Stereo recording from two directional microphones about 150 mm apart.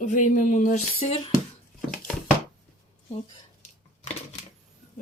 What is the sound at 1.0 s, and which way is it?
Speech, 40° left (ahead or behind).